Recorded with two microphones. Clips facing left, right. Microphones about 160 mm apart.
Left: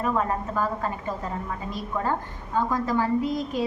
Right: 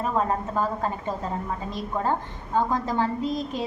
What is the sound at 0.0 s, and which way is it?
Speech, 25° right (ahead or behind).